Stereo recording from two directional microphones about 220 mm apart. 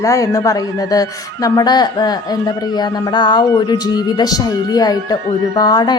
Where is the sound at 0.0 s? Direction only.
15° left (ahead or behind).